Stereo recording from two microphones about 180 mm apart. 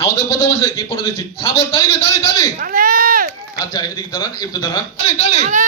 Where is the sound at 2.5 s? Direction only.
50° right (ahead or behind).